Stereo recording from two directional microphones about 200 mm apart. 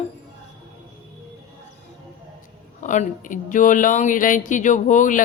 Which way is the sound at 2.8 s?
40° left (ahead or behind).